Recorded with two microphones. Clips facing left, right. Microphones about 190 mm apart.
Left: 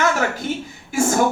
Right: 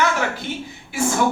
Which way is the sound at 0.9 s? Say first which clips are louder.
Left 3 dB; 45° left (ahead or behind).